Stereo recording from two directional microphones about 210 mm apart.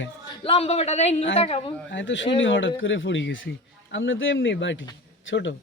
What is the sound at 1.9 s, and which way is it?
A man's voice, 60° left (ahead or behind).